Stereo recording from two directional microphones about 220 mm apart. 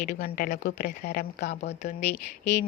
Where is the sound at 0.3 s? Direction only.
40° left (ahead or behind).